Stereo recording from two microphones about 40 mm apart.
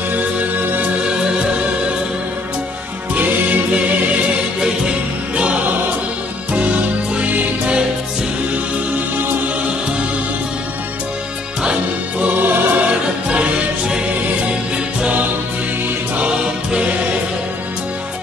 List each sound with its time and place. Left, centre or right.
0.1 s music: right
0.6 s music: right
1.0 s music: right
3.2 s music: right
4.6 s music: right
12.2 s music: right
13.3 s music: right
16.3 s music: right